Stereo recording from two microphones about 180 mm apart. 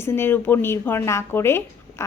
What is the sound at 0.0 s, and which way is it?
Speech, 10° left (ahead or behind).